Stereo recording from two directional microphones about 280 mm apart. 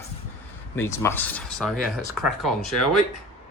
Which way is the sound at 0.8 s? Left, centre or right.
Centre.